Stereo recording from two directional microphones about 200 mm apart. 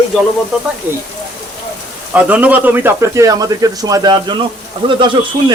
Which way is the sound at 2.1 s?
5° right (ahead or behind).